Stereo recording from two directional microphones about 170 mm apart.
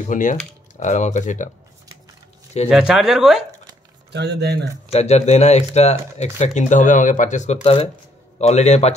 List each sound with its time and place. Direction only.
0.1 s speech: 50° left (ahead or behind)
2.7 s speech: centre (ahead or behind)
4.1 s speech: 80° right
4.9 s speech: 40° left (ahead or behind)